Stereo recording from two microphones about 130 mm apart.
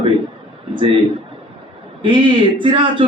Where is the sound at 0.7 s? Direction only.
40° right (ahead or behind).